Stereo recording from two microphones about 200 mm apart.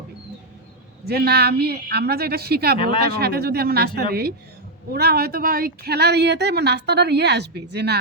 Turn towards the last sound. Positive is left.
turn(degrees=-55)  # may be behind; listen again after turning